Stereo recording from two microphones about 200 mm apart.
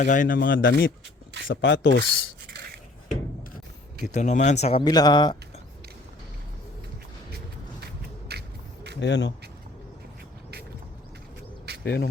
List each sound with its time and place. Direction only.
0.0 s speech: 45° left (ahead or behind); by 2.0 s 60° left (ahead or behind)
4.0 s speech: 35° left (ahead or behind); by 5.4 s 20° left (ahead or behind)
8.3 s a sound: 55° right (ahead or behind)
9.0 s speech: 60° left (ahead or behind)
11.7 s cricket: 55° right (ahead or behind)